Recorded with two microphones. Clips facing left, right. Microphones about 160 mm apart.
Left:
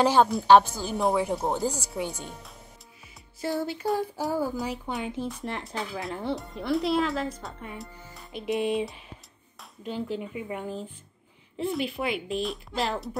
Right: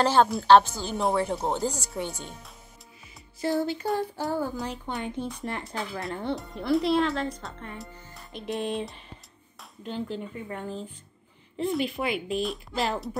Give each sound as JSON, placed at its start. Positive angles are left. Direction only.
{"t": 0.0, "sound": "speech", "side_deg": 10}
{"t": 3.3, "sound": "a woman's voice", "side_deg": 0}